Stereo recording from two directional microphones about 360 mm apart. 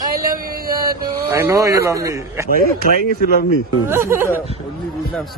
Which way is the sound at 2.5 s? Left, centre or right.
Left.